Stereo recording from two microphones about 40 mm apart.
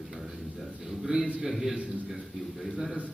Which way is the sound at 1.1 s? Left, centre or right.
Right.